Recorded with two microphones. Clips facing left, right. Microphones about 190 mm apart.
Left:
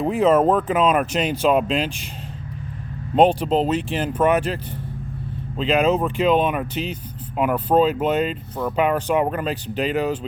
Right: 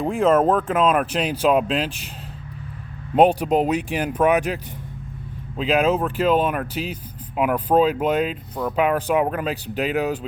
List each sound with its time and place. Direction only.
0.0 s speech: 5° left (ahead or behind)
3.2 s speech: 10° right (ahead or behind)
5.5 s speech: 5° right (ahead or behind)